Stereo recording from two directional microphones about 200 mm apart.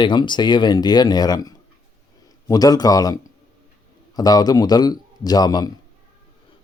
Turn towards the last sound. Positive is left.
turn(degrees=20)  # may be behind; listen again after turning